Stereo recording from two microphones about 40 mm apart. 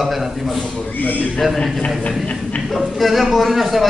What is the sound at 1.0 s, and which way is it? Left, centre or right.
Speech, left.